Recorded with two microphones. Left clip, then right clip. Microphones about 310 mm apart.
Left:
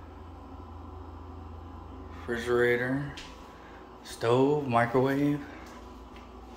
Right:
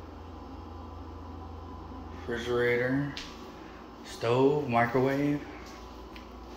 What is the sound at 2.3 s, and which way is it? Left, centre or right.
Speech, centre.